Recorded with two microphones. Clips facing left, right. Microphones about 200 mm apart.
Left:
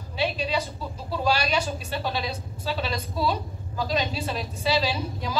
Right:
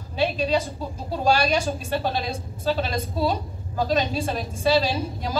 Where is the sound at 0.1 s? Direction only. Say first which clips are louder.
Right 4 dB; 45° right (ahead or behind).